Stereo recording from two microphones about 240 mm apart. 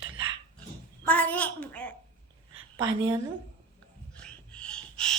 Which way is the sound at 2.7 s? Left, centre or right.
Centre.